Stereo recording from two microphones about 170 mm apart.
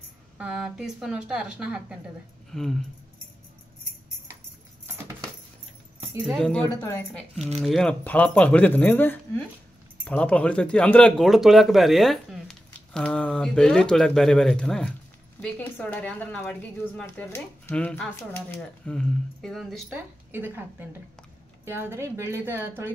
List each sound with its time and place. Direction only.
0.4 s speech: 5° right (ahead or behind)
6.2 s speech: 5° left (ahead or behind)
6.8 s speech: 20° left (ahead or behind)
7.5 s speech: centre (ahead or behind)
20.2 s a woman's voice: 10° right (ahead or behind)